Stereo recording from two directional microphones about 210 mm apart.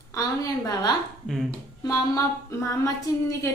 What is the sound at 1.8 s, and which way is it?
Speech, 15° left (ahead or behind).